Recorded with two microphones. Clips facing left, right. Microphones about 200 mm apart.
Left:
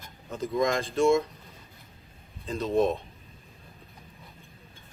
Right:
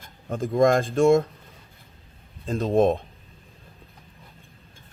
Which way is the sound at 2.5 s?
50° right (ahead or behind).